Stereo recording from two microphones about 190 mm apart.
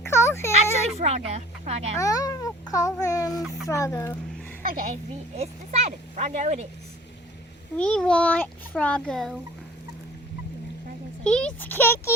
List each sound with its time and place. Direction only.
0.0 s a sound: 15° left (ahead or behind)
0.5 s speech: 35° right (ahead or behind)
2.0 s a child's voice: 20° left (ahead or behind)
4.6 s a child's voice: 50° right (ahead or behind)
5.4 s speech: 35° right (ahead or behind)
7.8 s a child's voice: 5° left (ahead or behind)
11.2 s a child's voice: 5° left (ahead or behind)